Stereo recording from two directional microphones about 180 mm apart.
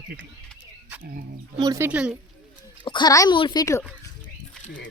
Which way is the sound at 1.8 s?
5° right (ahead or behind).